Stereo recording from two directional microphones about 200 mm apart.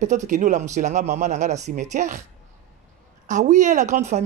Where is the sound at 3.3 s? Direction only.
35° right (ahead or behind).